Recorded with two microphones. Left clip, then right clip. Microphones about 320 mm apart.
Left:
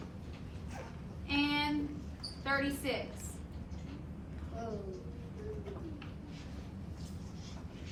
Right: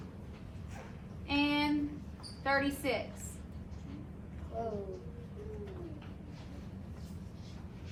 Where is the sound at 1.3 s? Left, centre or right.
Right.